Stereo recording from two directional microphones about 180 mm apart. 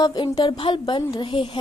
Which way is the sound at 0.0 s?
25° left (ahead or behind).